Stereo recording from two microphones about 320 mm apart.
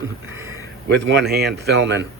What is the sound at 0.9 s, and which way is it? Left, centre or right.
Speech, right.